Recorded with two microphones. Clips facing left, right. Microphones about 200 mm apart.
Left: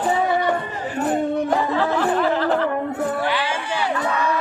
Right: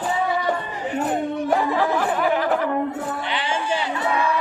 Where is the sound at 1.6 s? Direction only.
15° right (ahead or behind).